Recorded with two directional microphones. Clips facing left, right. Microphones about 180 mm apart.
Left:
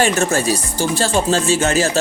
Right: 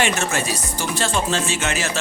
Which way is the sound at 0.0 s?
35° left (ahead or behind).